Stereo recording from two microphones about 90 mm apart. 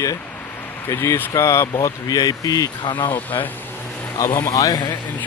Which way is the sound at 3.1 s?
20° left (ahead or behind).